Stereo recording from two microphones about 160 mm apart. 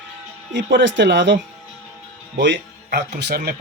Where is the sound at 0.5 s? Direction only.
90° right.